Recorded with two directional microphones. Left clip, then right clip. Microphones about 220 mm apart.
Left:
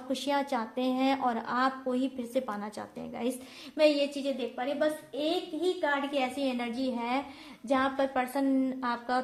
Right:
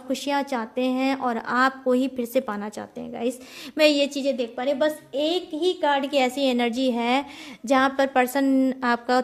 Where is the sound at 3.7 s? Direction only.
45° right (ahead or behind).